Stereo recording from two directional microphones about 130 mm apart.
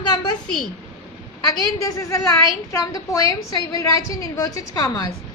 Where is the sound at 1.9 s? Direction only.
25° left (ahead or behind).